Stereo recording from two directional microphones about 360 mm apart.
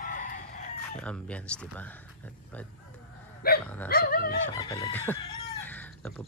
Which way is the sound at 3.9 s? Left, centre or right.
Left.